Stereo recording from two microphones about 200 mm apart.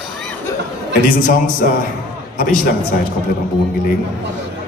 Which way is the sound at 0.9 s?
40° left (ahead or behind).